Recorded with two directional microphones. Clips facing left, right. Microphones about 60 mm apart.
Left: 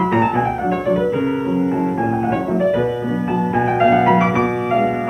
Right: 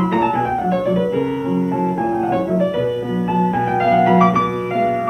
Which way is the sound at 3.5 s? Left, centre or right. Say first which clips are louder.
Left 3 dB; left.